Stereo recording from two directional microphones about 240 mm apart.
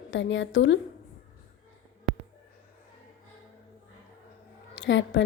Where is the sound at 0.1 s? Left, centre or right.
Left.